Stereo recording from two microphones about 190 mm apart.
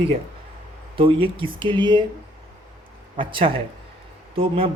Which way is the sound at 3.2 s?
25° right (ahead or behind).